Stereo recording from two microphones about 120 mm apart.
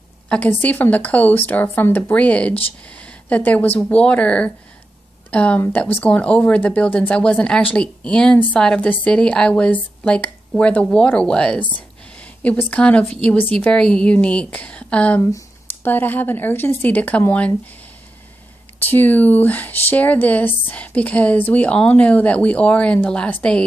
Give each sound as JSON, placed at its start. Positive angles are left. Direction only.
{"t": 0.3, "sound": "speech", "side_deg": 15}
{"t": 18.8, "sound": "speech", "side_deg": 15}